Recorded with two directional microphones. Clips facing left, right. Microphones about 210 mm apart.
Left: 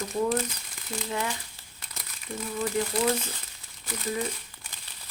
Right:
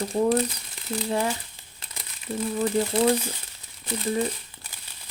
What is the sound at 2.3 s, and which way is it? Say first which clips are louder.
A woman's voice: right 5 dB; 35° right (ahead or behind).